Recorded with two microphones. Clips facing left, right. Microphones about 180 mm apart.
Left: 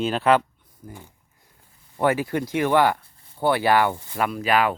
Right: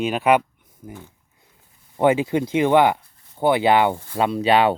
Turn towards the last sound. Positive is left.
turn(degrees=-30)  # may be behind; listen again after turning